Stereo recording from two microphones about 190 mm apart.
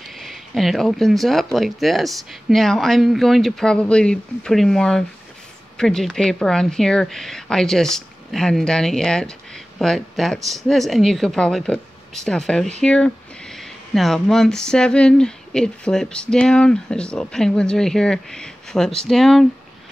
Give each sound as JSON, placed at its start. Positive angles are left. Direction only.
{"t": 0.1, "sound": "speech", "side_deg": 0}